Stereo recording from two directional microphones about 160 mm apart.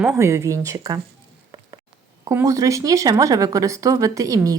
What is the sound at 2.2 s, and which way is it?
Speech, 20° right (ahead or behind).